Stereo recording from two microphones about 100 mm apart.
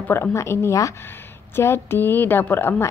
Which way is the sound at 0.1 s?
25° left (ahead or behind).